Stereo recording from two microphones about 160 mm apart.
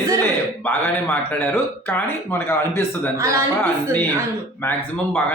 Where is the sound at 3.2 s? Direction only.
20° right (ahead or behind).